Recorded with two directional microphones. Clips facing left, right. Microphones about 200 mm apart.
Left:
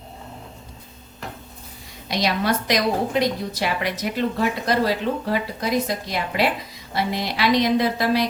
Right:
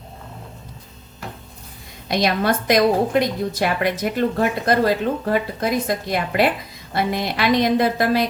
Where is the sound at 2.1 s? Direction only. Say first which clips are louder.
Right 3 dB; 50° right (ahead or behind).